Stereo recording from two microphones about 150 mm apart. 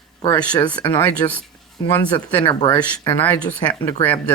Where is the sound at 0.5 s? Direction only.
30° left (ahead or behind).